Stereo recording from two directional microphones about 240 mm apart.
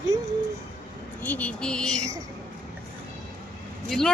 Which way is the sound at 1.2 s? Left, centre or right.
Centre.